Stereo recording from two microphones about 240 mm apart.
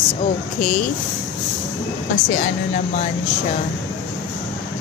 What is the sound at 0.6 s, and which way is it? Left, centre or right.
Speech, left.